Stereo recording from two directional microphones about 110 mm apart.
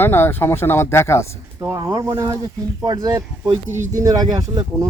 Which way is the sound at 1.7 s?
35° right (ahead or behind).